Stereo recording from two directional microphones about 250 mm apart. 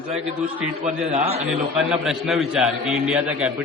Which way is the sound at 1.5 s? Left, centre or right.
Centre.